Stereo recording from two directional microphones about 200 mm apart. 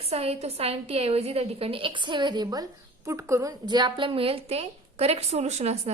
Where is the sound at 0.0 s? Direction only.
30° right (ahead or behind).